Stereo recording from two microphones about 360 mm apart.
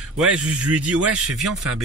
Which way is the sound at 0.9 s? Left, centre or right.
Right.